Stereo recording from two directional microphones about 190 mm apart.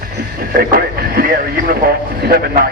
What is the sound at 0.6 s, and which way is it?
Speech, 50° right (ahead or behind).